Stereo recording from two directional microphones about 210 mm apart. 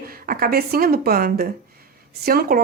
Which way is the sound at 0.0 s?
45° right (ahead or behind).